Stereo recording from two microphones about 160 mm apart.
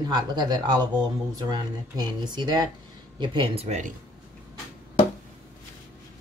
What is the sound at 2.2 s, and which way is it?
Speech, 30° right (ahead or behind).